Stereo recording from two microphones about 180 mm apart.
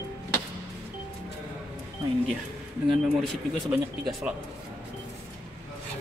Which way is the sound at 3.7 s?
5° right (ahead or behind).